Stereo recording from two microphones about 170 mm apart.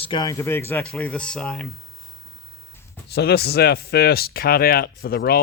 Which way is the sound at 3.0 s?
70° left (ahead or behind).